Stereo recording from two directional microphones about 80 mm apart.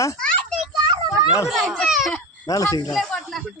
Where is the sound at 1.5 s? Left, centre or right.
Centre.